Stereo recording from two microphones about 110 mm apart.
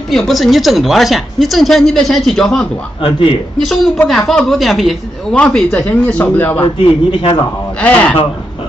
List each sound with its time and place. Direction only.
0.1 s a woman's voice: centre (ahead or behind)
3.0 s a man's voice: 50° left (ahead or behind)
3.5 s a woman's voice: centre (ahead or behind); by 6.6 s 15° left (ahead or behind)
7.1 s a man's voice: 45° left (ahead or behind)
7.8 s speech: 10° left (ahead or behind)